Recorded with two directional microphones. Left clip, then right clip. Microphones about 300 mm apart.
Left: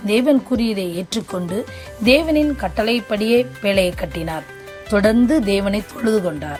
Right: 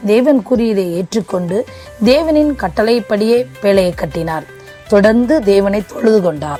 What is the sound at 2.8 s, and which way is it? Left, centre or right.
Speech, centre.